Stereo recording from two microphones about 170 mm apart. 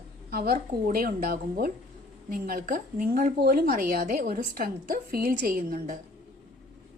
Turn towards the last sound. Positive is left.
turn(degrees=-60)  # may be behind; listen again after turning